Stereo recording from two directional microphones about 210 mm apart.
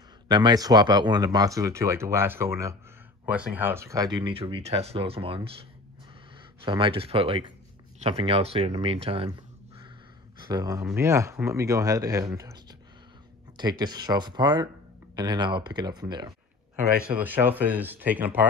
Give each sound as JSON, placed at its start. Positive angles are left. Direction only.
{"t": 0.3, "sound": "speech", "side_deg": -20}
{"t": 10.4, "sound": "speech", "side_deg": -15}
{"t": 13.6, "sound": "speech", "side_deg": -20}
{"t": 17.0, "sound": "speech", "side_deg": -5}